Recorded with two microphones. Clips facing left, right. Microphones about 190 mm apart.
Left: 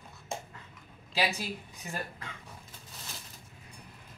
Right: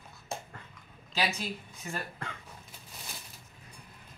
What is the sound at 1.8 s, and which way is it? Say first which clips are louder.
Speech: right 1 dB; 20° left (ahead or behind).